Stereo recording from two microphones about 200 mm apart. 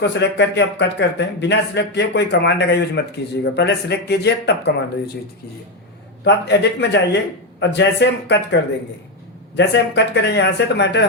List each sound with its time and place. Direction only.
0.0 s a man's voice: 60° left (ahead or behind)
6.2 s a man's voice: 60° left (ahead or behind)
9.6 s a man's voice: 60° left (ahead or behind)